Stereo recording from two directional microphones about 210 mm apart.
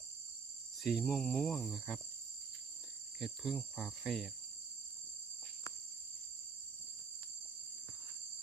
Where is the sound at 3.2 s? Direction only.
Centre (ahead or behind).